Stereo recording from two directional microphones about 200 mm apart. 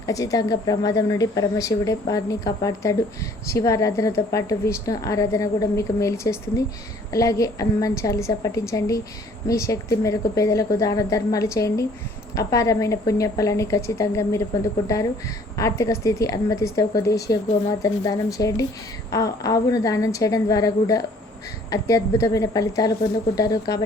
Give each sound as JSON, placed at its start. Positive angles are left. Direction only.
{"t": 0.0, "sound": "a woman's voice", "side_deg": 15}